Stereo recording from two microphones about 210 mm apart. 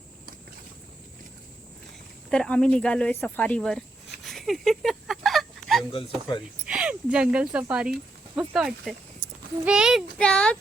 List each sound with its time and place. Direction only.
2.3 s speech: 5° left (ahead or behind)
4.3 s a sound: centre (ahead or behind)
5.9 s speech: 25° left (ahead or behind)
6.7 s speech: 5° right (ahead or behind)